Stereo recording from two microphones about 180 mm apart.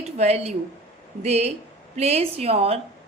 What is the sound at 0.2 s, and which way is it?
Speech, 35° right (ahead or behind).